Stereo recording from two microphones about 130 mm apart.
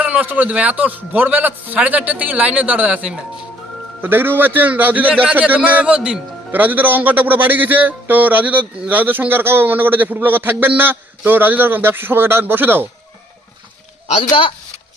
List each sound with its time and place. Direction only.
0.0 s a man's voice: 10° right (ahead or behind)
14.0 s speech: 45° left (ahead or behind)